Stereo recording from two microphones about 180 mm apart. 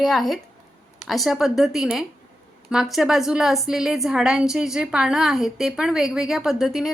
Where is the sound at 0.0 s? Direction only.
Centre (ahead or behind).